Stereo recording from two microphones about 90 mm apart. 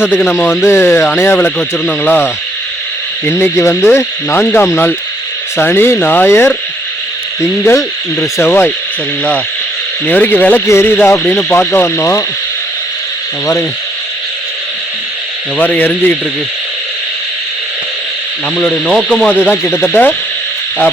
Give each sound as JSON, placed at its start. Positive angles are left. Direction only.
{"t": 0.6, "sound": "speech", "side_deg": 30}
{"t": 10.1, "sound": "speech", "side_deg": 20}
{"t": 10.7, "sound": "speech", "side_deg": 25}
{"t": 15.5, "sound": "speech", "side_deg": 20}
{"t": 18.7, "sound": "speech", "side_deg": 5}
{"t": 19.3, "sound": "speech", "side_deg": 20}